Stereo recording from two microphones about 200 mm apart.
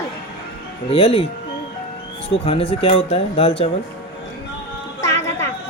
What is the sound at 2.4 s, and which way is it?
Speech, 30° left (ahead or behind).